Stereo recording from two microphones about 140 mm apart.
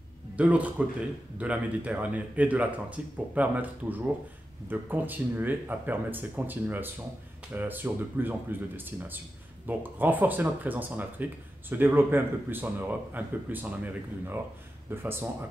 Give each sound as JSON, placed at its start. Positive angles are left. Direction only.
{"t": 0.4, "sound": "speech", "side_deg": -10}
{"t": 14.9, "sound": "speech", "side_deg": -15}